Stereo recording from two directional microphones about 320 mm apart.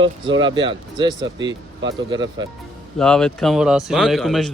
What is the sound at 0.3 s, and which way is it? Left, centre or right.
Speech, centre.